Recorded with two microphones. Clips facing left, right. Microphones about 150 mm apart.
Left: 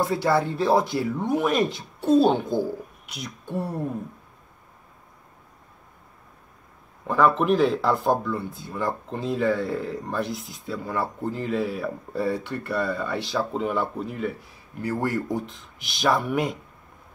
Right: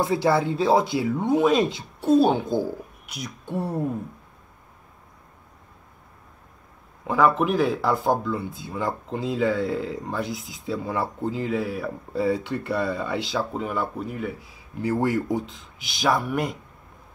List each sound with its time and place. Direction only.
0.0 s speech: 15° right (ahead or behind)
7.1 s speech: 10° right (ahead or behind)
14.8 s speech: 20° right (ahead or behind)
16.0 s speech: 5° right (ahead or behind)